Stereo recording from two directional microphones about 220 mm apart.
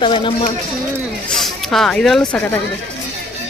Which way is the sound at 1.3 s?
Centre (ahead or behind).